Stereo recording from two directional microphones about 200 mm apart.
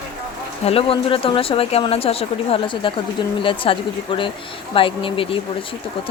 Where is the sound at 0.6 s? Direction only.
30° left (ahead or behind).